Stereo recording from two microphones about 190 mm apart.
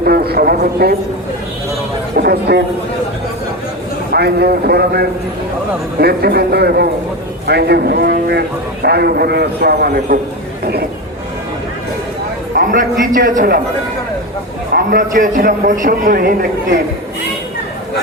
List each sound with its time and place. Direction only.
0.0 s speech: 55° right (ahead or behind)
2.1 s speech: 55° right (ahead or behind)
4.1 s a man's voice: 55° right (ahead or behind)
12.5 s a man's voice: 45° right (ahead or behind)
14.7 s a man's voice: 50° right (ahead or behind)